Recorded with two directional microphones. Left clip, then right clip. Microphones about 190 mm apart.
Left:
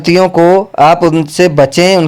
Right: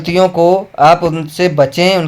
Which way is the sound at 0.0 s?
45° left (ahead or behind).